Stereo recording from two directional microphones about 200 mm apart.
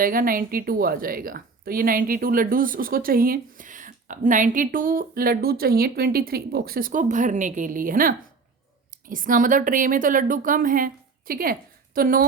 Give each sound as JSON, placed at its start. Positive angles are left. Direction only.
{"t": 0.0, "sound": "a woman's voice", "side_deg": -45}